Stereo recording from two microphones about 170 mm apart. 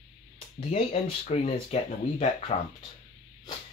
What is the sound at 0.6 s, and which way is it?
Speech, 35° left (ahead or behind).